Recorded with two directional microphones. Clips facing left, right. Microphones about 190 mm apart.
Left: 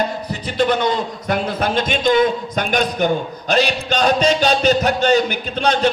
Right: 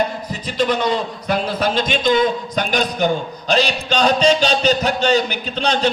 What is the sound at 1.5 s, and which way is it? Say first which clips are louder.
A man's voice: even; 55° left (ahead or behind).